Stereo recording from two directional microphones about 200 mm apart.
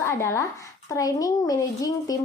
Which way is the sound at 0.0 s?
15° left (ahead or behind).